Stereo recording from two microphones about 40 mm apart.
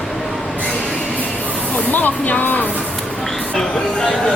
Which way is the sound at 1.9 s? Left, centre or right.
Left.